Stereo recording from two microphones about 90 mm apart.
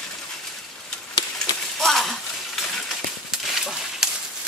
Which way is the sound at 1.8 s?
Centre (ahead or behind).